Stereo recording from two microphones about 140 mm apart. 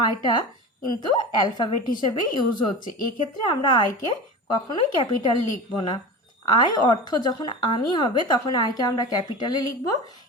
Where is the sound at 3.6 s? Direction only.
30° left (ahead or behind).